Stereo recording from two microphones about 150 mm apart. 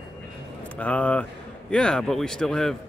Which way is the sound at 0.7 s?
10° left (ahead or behind).